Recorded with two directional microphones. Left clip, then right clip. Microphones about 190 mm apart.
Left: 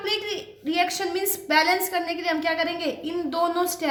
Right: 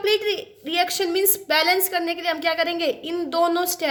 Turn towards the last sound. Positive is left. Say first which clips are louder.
# right 3 dB
turn(degrees=-50)  # may be behind; listen again after turning